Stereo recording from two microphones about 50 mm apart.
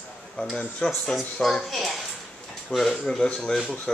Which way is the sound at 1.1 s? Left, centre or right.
Centre.